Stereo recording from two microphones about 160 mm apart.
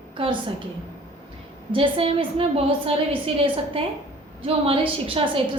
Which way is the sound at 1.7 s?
35° right (ahead or behind).